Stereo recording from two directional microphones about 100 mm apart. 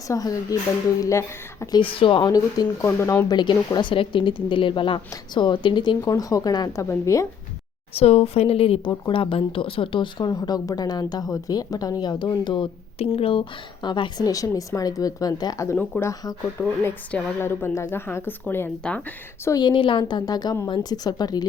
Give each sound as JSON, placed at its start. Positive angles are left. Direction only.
{"t": 0.1, "sound": "speech", "side_deg": 40}
{"t": 1.8, "sound": "speech", "side_deg": 60}
{"t": 2.3, "sound": "speech", "side_deg": 35}
{"t": 2.8, "sound": "speech", "side_deg": 25}
{"t": 3.2, "sound": "speech", "side_deg": 45}
{"t": 6.1, "sound": "speech", "side_deg": 35}
{"t": 6.8, "sound": "speech", "side_deg": 30}
{"t": 7.9, "sound": "a woman's voice", "side_deg": 90}
{"t": 10.2, "sound": "speech", "side_deg": 40}
{"t": 13.0, "sound": "speech", "side_deg": 70}
{"t": 15.6, "sound": "speech", "side_deg": 20}
{"t": 17.4, "sound": "speech", "side_deg": 25}
{"t": 18.8, "sound": "speech", "side_deg": 10}
{"t": 19.5, "sound": "speech", "side_deg": 45}